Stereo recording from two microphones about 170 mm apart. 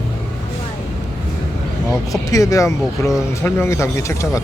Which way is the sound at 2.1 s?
20° left (ahead or behind).